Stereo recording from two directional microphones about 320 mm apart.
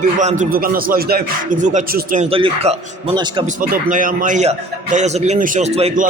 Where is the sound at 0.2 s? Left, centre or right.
Right.